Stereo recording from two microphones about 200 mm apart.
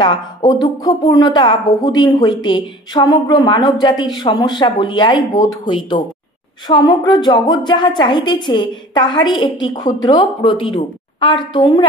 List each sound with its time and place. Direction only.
0.0 s a woman's voice: 20° left (ahead or behind)
6.7 s a woman's voice: 20° left (ahead or behind)